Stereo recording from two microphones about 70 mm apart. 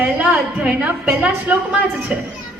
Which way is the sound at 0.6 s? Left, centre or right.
Centre.